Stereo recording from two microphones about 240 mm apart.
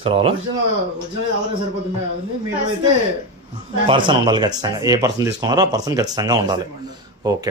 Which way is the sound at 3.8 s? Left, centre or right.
Centre.